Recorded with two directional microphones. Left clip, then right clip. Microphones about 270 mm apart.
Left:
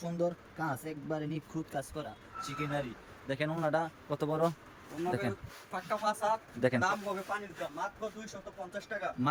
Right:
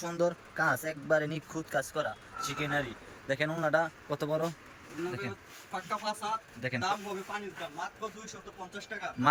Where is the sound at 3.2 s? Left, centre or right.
Centre.